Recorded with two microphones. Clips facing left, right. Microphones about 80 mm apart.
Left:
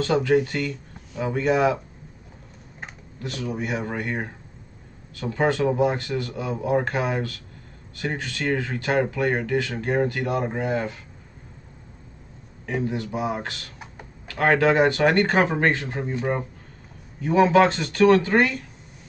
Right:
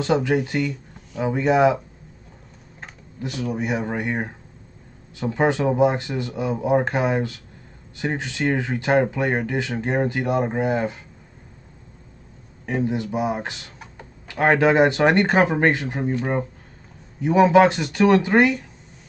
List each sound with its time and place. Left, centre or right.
0.0 s speech: centre
3.2 s speech: centre
12.6 s speech: centre
16.1 s speech: centre
17.5 s speech: centre